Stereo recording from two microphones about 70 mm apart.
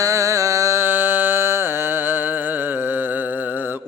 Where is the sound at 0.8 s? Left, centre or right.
Right.